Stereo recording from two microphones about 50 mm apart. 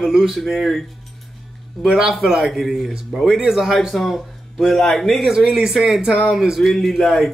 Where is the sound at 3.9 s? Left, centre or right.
Centre.